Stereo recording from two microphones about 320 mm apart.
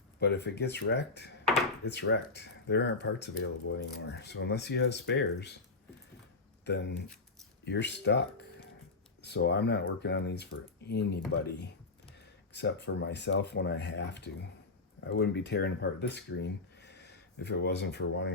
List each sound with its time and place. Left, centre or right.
0.2 s speech: left
6.7 s speech: left
12.5 s speech: left